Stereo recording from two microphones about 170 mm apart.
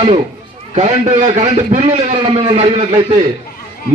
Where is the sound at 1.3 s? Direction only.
40° right (ahead or behind).